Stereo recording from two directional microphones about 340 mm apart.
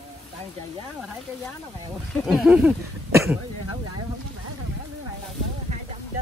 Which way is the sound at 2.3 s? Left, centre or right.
Centre.